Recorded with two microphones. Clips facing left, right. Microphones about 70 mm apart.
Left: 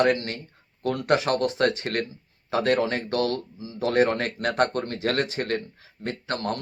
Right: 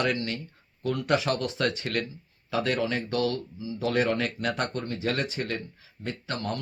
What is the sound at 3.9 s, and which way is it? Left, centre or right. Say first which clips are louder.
Speech: left 4 dB; left.